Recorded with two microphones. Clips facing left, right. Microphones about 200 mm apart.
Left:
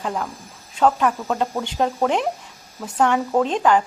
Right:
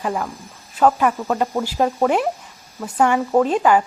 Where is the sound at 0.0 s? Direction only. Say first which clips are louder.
Right 2 dB; 5° right (ahead or behind).